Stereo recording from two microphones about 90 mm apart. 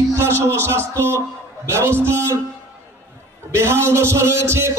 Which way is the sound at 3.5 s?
30° right (ahead or behind).